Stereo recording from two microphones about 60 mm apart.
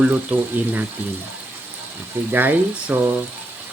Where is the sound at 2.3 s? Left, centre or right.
Right.